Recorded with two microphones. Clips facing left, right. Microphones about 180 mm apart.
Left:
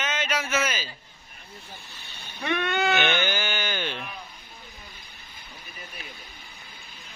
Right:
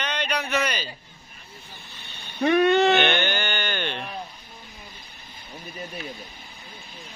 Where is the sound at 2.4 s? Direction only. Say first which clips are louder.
Right 9 dB; 40° right (ahead or behind).